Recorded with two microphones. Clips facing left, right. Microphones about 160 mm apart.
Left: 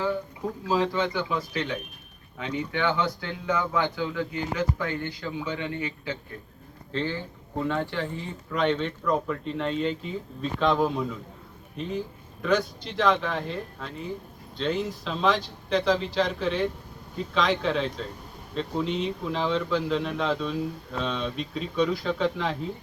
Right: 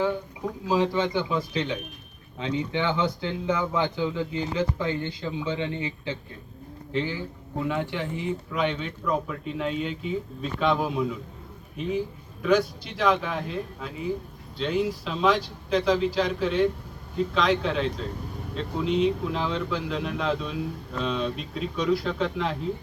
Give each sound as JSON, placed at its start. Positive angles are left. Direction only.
{"t": 0.7, "sound": "speech", "side_deg": -20}
{"t": 6.9, "sound": "speech", "side_deg": -15}